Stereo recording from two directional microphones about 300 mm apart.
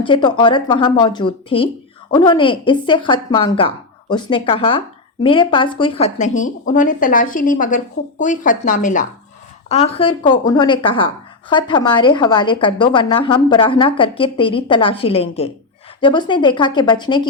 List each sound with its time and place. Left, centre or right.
0.0 s speech: centre